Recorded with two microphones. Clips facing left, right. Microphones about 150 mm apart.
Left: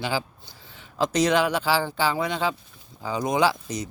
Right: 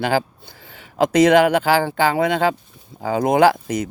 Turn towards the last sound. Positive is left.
turn(degrees=-55)  # may be behind; listen again after turning